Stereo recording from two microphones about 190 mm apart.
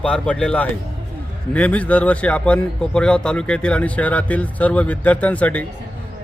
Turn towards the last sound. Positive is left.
turn(degrees=10)  # may be behind; listen again after turning